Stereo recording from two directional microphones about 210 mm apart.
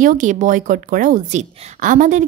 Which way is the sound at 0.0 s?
40° right (ahead or behind).